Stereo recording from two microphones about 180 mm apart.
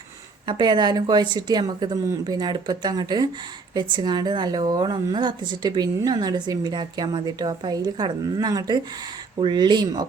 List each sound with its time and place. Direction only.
0.4 s a woman's voice: 25° right (ahead or behind)